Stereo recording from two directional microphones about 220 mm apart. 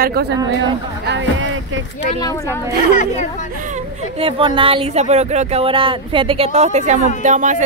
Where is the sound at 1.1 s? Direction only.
60° right (ahead or behind).